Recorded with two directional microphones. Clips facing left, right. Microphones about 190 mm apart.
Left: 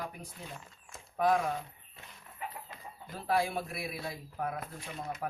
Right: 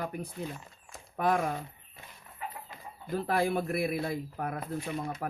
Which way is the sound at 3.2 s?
55° right (ahead or behind).